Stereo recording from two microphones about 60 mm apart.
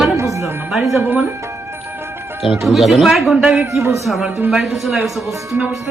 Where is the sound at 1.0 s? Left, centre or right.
Right.